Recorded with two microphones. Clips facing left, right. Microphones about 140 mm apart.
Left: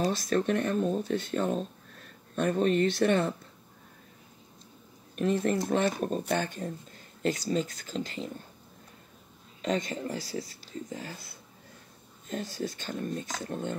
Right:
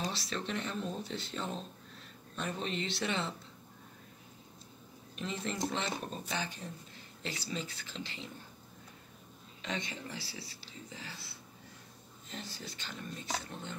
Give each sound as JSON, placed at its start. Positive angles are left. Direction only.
{"t": 0.0, "sound": "speech", "side_deg": 50}
{"t": 5.1, "sound": "speech", "side_deg": 50}
{"t": 9.6, "sound": "speech", "side_deg": 45}